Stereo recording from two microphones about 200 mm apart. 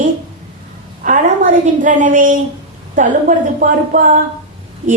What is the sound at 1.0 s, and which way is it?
Speech, 40° right (ahead or behind).